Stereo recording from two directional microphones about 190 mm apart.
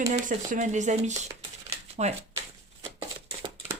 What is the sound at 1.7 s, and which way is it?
Shuffling cards, 35° right (ahead or behind).